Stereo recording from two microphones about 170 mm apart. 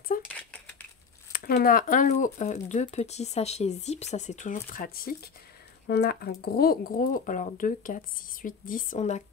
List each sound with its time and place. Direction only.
0.1 s cutlery: 55° left (ahead or behind)
1.3 s speech: 60° left (ahead or behind)
5.9 s speech: 75° left (ahead or behind); by 9.2 s 40° left (ahead or behind)